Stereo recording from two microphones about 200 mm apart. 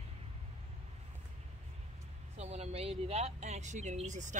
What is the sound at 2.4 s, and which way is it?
Speech, 30° right (ahead or behind).